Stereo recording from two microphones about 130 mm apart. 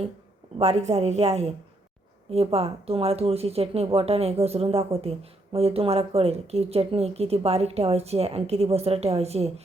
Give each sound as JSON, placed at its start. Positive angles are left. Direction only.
{"t": 0.6, "sound": "a woman's voice", "side_deg": -55}